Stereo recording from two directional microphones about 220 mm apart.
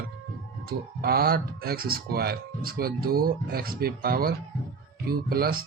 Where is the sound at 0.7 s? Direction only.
45° right (ahead or behind).